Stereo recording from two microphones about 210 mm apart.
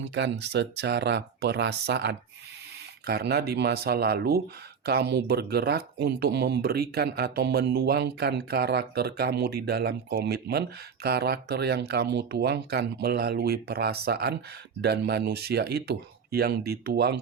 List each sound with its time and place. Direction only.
0.0 s speech: 55° right (ahead or behind)